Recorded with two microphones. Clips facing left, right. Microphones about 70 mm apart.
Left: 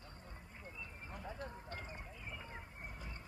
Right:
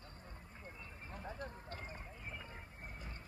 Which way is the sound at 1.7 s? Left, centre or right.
Right.